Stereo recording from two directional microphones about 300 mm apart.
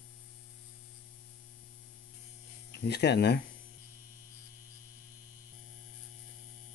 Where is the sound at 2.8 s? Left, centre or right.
Left.